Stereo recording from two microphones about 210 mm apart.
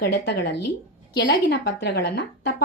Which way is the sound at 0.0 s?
55° left (ahead or behind).